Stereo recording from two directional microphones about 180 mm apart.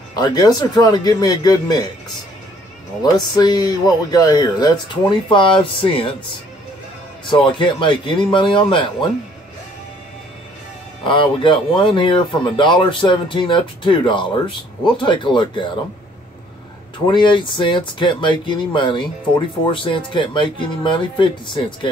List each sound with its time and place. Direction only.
0.1 s speech: 20° left (ahead or behind)
3.0 s speech: 20° left (ahead or behind)
7.2 s speech: 25° left (ahead or behind)
11.1 s speech: 25° left (ahead or behind)
17.0 s speech: 25° left (ahead or behind)